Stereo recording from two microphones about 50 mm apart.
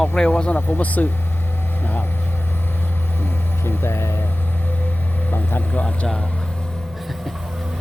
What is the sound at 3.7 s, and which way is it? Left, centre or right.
Speech, left.